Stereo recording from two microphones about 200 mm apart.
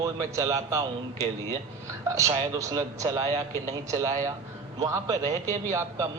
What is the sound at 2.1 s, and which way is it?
A man's voice, 15° right (ahead or behind).